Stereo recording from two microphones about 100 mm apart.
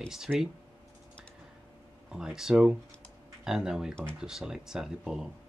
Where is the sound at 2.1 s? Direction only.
5° right (ahead or behind).